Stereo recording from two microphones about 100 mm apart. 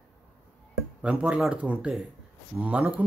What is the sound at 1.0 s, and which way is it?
Speech, 10° right (ahead or behind).